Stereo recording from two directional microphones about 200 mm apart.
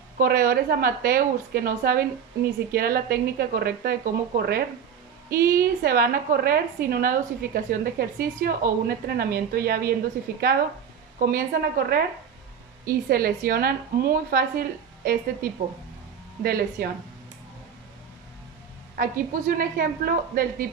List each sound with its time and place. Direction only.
0.2 s a woman's voice: 45° right (ahead or behind)
11.2 s a woman's voice: 45° right (ahead or behind)
18.9 s a woman's voice: 45° right (ahead or behind)